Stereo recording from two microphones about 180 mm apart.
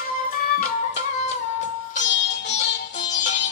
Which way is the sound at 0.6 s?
45° left (ahead or behind).